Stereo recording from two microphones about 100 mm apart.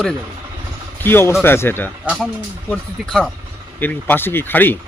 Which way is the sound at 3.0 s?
5° left (ahead or behind).